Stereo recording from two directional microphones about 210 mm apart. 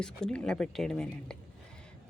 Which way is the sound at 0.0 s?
5° left (ahead or behind).